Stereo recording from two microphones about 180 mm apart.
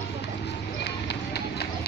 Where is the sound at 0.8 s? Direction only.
65° left (ahead or behind).